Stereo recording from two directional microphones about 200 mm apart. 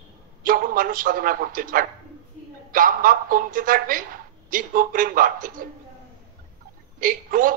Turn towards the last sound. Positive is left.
turn(degrees=-45)  # may be behind; listen again after turning